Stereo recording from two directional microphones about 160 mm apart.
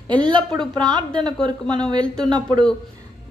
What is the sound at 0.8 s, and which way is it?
A woman's voice, 25° right (ahead or behind).